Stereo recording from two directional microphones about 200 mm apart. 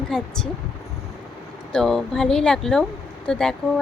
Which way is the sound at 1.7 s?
Centre (ahead or behind).